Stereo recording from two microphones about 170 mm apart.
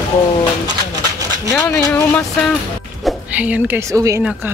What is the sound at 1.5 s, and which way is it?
Speech, 15° left (ahead or behind).